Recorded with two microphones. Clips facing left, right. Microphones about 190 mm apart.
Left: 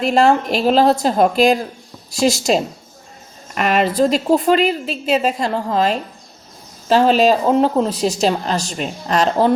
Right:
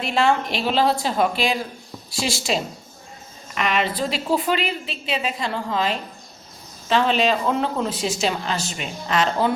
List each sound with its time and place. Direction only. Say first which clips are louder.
0.0 s a woman's voice: left 6 dB; 45° left (ahead or behind)